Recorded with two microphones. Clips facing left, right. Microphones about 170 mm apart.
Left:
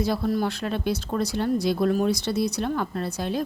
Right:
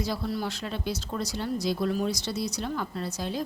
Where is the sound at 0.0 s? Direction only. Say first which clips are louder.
Left 6 dB; 55° left (ahead or behind).